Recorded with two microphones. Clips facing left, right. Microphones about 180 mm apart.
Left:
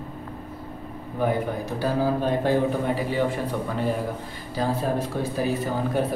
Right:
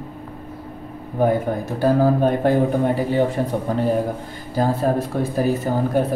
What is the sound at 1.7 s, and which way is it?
Speech, 50° right (ahead or behind).